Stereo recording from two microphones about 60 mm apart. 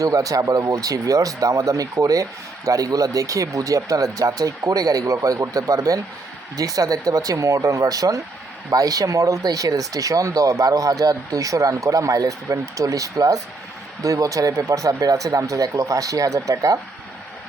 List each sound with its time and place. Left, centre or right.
0.0 s speech: right